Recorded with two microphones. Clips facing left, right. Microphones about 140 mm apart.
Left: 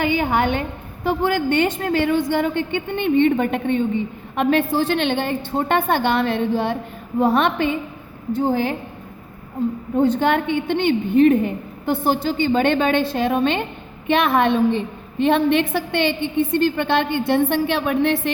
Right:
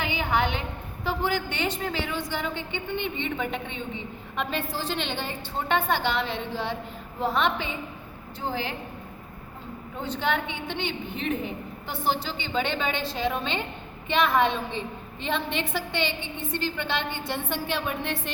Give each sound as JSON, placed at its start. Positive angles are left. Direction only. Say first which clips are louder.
{"t": 0.0, "sound": "a woman's voice", "louder": "left 7 dB", "side_deg": 50}
{"t": 9.9, "sound": "a woman's voice", "louder": "left 10 dB", "side_deg": 50}